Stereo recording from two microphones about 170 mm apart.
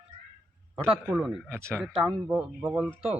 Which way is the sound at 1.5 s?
15° right (ahead or behind).